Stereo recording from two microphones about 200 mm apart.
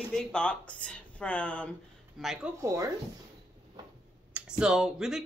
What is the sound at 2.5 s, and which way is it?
Speech, 15° right (ahead or behind).